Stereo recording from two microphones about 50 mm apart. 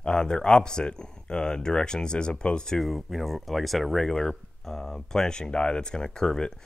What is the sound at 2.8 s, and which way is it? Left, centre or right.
Speech, centre.